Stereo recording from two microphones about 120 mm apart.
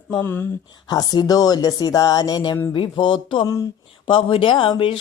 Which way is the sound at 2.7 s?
45° left (ahead or behind).